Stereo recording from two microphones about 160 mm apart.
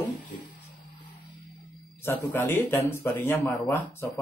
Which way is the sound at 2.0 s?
15° left (ahead or behind).